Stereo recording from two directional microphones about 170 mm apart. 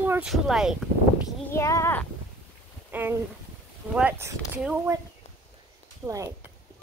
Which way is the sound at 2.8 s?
10° right (ahead or behind).